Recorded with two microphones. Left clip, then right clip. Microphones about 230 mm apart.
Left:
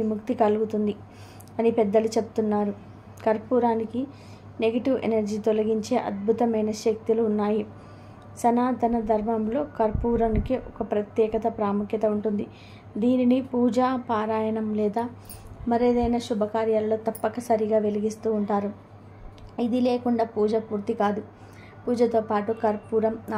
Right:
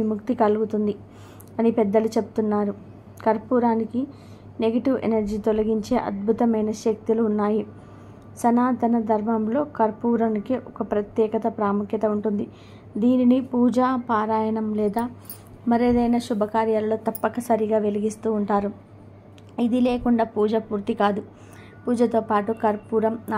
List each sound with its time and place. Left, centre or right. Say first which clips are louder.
0.2 s a woman's voice: right 2 dB; centre
19.5 s a woman's voice: right 2 dB; centre